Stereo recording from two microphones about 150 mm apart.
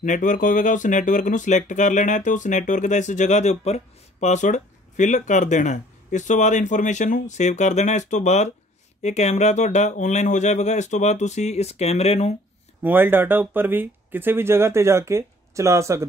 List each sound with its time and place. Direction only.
0.0 s speech: 55° left (ahead or behind)
12.8 s speech: 15° right (ahead or behind)